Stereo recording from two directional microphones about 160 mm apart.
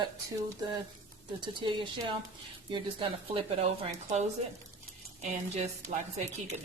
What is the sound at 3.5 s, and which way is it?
Speech, 40° right (ahead or behind).